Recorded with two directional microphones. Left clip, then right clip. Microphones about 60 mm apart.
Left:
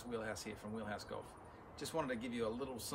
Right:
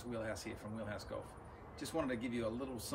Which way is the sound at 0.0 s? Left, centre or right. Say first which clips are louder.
Right 1 dB; left.